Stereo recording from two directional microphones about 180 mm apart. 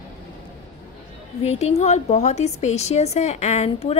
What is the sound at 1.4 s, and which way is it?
Speech, 35° left (ahead or behind).